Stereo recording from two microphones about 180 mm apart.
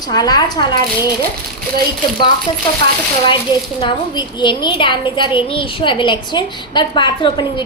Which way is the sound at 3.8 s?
25° left (ahead or behind).